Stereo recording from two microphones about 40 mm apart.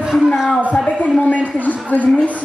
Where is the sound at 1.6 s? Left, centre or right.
Left.